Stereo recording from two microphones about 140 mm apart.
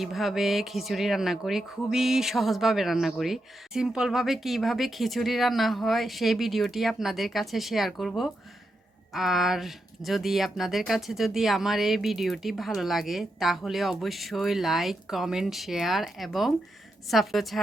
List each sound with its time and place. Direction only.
0.0 s speech: centre (ahead or behind)